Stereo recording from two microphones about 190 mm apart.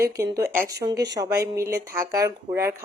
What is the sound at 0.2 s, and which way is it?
Speech, 15° right (ahead or behind).